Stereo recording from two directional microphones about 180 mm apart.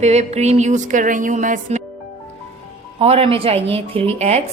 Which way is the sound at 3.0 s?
35° right (ahead or behind).